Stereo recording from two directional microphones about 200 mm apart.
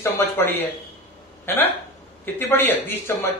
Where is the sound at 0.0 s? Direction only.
10° left (ahead or behind).